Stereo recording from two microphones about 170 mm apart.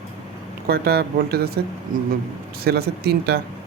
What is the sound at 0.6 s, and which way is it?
Speech, 65° right (ahead or behind).